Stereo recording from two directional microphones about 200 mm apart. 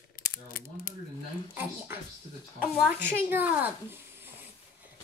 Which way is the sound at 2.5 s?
5° right (ahead or behind).